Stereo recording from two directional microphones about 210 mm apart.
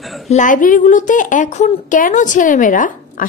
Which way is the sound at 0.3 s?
35° left (ahead or behind).